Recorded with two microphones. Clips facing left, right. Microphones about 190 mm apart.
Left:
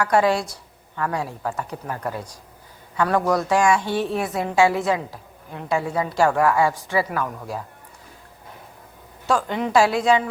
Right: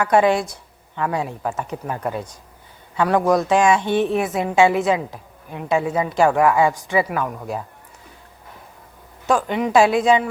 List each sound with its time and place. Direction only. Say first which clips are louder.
0.0 s a woman's voice: right 3 dB; 20° right (ahead or behind)
9.2 s a woman's voice: right 3 dB; 15° right (ahead or behind)